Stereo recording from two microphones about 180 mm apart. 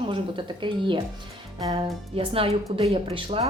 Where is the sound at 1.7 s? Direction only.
30° right (ahead or behind).